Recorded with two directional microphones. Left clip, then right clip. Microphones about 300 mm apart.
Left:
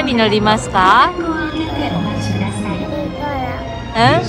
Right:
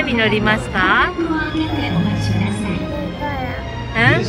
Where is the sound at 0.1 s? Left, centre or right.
Centre.